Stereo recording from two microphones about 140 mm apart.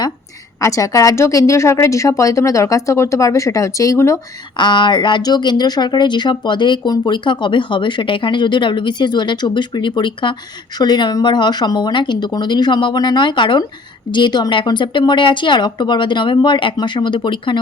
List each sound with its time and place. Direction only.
0.6 s a woman's voice: 25° left (ahead or behind)
4.5 s speech: 35° left (ahead or behind)